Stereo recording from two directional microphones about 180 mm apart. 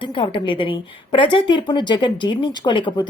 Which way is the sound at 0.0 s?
25° left (ahead or behind).